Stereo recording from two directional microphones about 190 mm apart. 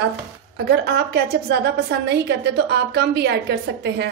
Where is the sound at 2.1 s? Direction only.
60° right (ahead or behind).